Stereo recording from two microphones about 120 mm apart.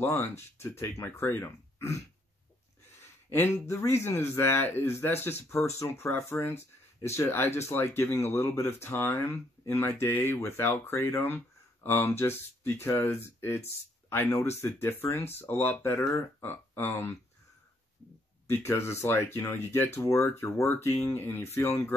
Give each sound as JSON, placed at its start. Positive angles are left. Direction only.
{"t": 0.1, "sound": "speech", "side_deg": 15}
{"t": 3.3, "sound": "speech", "side_deg": 20}
{"t": 18.5, "sound": "speech", "side_deg": 20}